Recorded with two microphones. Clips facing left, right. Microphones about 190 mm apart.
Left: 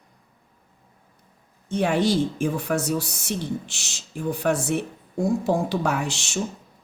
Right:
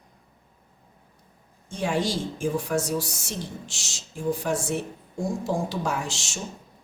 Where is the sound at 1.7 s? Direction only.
60° left (ahead or behind).